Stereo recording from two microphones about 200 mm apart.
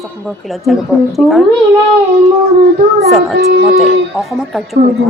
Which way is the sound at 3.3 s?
50° right (ahead or behind).